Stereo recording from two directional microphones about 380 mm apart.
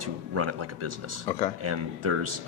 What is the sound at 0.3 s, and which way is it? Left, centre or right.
Speech, right.